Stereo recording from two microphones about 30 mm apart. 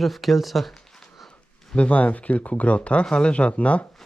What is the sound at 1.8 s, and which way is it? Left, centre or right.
Speech, left.